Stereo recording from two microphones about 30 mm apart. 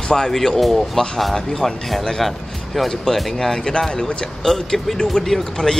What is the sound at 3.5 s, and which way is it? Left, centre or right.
Speech, centre.